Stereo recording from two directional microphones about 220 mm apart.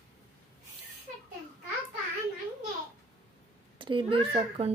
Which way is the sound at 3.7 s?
25° right (ahead or behind).